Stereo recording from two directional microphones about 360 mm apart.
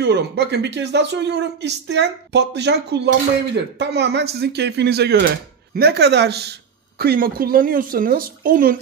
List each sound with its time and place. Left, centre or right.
0.0 s speech: right